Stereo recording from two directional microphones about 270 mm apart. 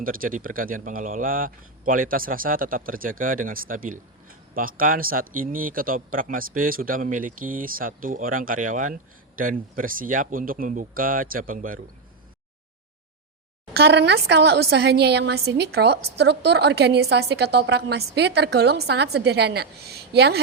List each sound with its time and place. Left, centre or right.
0.0 s a woman's voice: right
13.7 s a woman's voice: right